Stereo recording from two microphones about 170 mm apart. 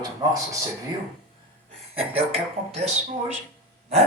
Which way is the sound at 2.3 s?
40° right (ahead or behind).